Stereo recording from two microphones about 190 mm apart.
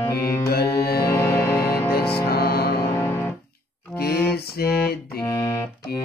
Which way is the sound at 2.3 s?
55° left (ahead or behind).